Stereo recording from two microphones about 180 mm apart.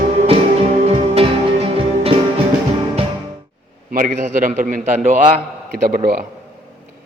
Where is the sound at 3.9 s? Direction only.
50° right (ahead or behind).